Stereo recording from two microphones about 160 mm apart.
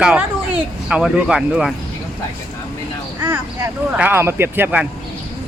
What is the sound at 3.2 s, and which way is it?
Speech, 10° right (ahead or behind).